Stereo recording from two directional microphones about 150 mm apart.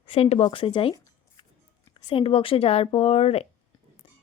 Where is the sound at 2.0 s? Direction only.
35° left (ahead or behind).